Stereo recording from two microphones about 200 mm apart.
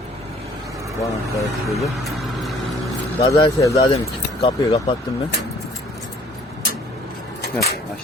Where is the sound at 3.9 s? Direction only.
30° left (ahead or behind).